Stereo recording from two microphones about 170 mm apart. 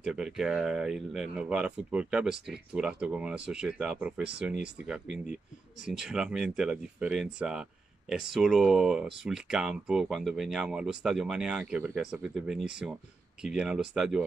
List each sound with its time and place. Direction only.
0.0 s speech: 5° right (ahead or behind)